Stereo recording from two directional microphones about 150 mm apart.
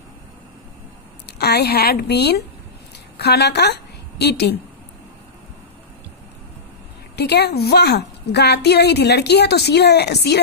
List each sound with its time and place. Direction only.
1.2 s a woman's voice: 90° left
7.2 s a woman's voice: 90° left